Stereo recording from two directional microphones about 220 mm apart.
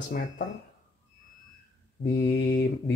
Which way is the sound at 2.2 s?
55° left (ahead or behind).